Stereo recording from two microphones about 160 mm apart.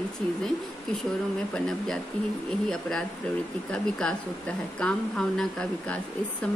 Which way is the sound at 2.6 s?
5° left (ahead or behind).